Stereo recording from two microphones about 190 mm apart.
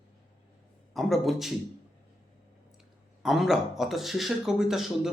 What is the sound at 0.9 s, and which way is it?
Speech, centre (ahead or behind).